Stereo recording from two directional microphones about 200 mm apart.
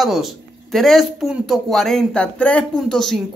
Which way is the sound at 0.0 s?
Centre (ahead or behind).